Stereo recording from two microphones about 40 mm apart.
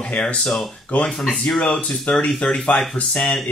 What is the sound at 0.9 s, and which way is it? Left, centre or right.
Speech, left.